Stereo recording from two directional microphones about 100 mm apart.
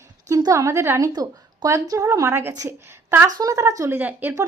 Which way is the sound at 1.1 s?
40° right (ahead or behind).